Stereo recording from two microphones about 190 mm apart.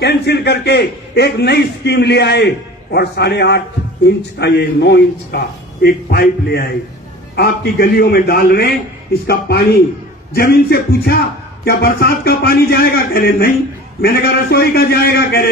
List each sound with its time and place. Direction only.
0.0 s a man's voice: 60° left (ahead or behind)
10.3 s a man's voice: 55° left (ahead or behind)